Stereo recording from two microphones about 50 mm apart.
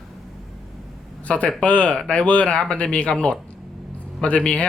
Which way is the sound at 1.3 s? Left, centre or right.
Left.